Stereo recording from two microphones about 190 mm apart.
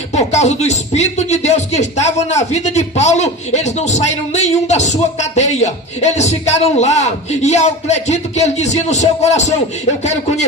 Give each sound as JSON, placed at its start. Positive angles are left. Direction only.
{"t": 0.1, "sound": "speech", "side_deg": 35}